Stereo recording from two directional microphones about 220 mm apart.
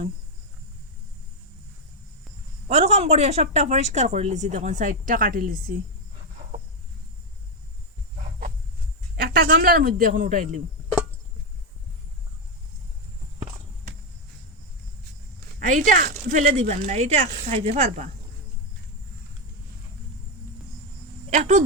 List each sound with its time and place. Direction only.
2.6 s speech: 30° right (ahead or behind)
6.4 s a sound: 35° right (ahead or behind)
9.3 s speech: 45° right (ahead or behind)
15.5 s speech: 35° right (ahead or behind)
21.2 s speech: 30° right (ahead or behind)